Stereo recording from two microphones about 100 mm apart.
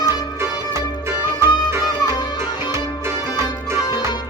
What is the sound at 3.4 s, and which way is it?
Music, 25° right (ahead or behind).